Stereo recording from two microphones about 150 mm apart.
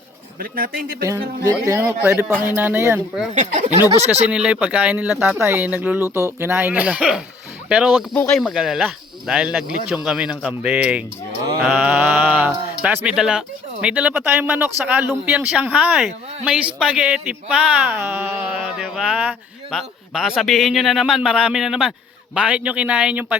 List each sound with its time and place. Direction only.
0.3 s speech: 75° right (ahead or behind)
1.5 s a man's voice: 20° right (ahead or behind)
3.3 s speech: 50° right (ahead or behind)
4.3 s a man's voice: 5° right (ahead or behind)